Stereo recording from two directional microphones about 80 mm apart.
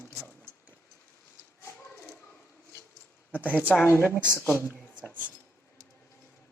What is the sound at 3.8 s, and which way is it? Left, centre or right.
Speech, left.